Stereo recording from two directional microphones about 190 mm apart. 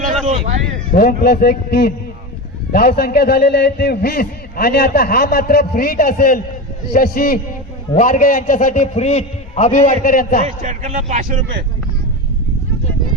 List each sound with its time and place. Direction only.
0.3 s a sound: 35° right (ahead or behind)
0.9 s a man's voice: 50° left (ahead or behind)
10.4 s a man's voice: 40° right (ahead or behind)